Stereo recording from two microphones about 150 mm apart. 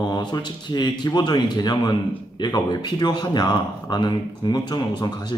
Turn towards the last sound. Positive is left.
turn(degrees=30)  # may be behind; listen again after turning